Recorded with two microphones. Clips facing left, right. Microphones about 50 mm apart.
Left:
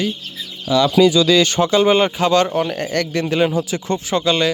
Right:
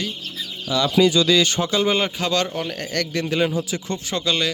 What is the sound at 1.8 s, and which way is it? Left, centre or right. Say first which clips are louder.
Speech: left 6 dB; left.